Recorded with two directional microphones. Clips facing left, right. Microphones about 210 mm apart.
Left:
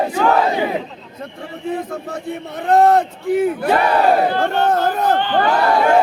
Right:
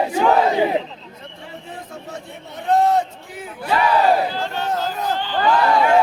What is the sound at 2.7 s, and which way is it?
Battle cry, 60° left (ahead or behind).